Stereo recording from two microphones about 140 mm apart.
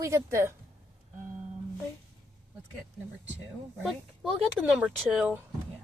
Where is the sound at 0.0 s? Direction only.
20° right (ahead or behind).